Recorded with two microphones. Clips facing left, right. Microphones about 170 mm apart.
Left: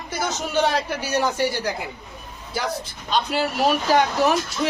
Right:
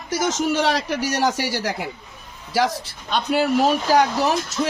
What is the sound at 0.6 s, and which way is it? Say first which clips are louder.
Speech: right 1 dB; 85° right.